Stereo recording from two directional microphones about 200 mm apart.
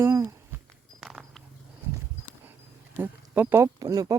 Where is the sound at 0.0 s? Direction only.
15° right (ahead or behind).